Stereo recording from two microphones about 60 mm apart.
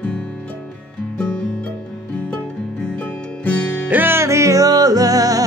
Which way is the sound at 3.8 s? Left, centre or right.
Right.